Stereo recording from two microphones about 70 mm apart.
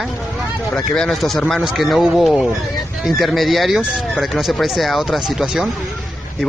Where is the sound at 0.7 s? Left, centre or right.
Centre.